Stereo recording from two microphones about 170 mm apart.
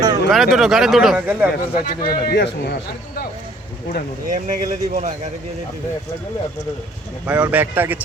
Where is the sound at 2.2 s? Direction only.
70° left (ahead or behind).